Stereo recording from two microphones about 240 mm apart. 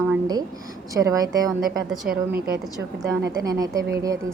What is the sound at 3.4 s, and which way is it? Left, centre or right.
Speech, centre.